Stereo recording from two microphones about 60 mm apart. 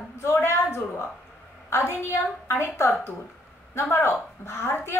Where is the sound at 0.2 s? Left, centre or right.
Left.